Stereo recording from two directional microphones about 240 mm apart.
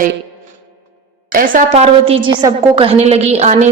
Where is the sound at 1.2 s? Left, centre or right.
Right.